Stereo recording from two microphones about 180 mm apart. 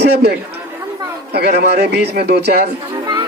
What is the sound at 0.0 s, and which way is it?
A man's voice, 65° right (ahead or behind).